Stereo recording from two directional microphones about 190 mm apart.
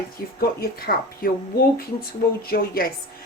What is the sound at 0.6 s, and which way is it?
Speech, 50° left (ahead or behind).